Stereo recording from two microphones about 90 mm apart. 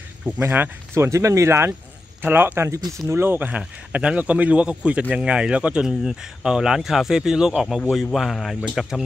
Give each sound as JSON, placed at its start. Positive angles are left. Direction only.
{"t": 0.4, "sound": "speech", "side_deg": -25}
{"t": 2.7, "sound": "speech", "side_deg": -35}
{"t": 3.1, "sound": "speech", "side_deg": -25}